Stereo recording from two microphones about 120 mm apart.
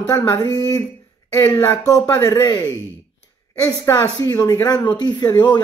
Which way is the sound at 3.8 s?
30° left (ahead or behind).